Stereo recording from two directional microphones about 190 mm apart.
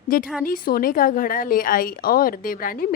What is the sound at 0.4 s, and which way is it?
A woman's voice, 50° left (ahead or behind).